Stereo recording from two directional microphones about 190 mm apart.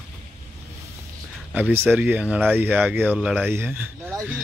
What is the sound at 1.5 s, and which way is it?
Speech, 10° right (ahead or behind).